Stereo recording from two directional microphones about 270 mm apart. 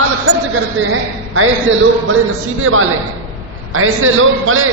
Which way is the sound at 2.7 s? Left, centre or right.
Right.